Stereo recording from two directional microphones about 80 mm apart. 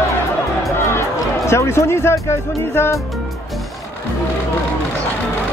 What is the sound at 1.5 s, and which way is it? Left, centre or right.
Speech, left.